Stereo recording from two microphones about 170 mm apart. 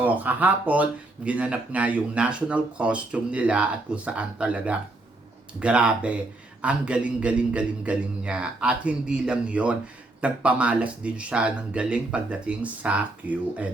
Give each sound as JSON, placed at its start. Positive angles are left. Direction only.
{"t": 0.0, "sound": "speech", "side_deg": -10}